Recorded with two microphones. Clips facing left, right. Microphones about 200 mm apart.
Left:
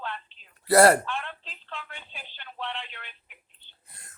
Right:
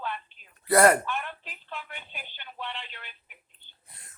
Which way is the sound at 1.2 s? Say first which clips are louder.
Right 1 dB; 10° right (ahead or behind).